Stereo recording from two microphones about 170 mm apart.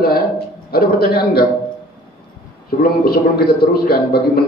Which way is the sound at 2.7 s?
65° left (ahead or behind).